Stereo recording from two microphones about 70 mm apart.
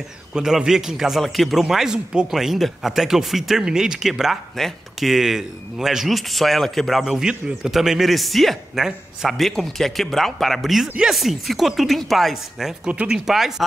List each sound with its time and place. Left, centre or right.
0.3 s a man's voice: centre
12.8 s speech: centre
13.3 s a man's voice: centre